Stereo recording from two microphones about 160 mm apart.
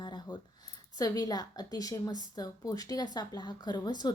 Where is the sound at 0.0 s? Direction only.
30° left (ahead or behind).